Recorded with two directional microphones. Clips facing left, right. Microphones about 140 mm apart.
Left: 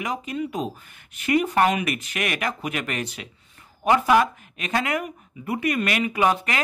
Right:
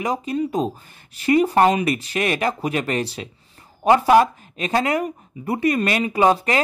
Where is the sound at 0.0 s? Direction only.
35° right (ahead or behind).